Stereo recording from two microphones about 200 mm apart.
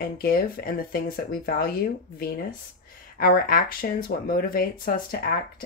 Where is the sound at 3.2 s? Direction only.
45° left (ahead or behind).